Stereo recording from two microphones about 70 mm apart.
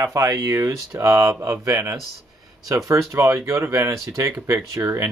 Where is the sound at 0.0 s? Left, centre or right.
Right.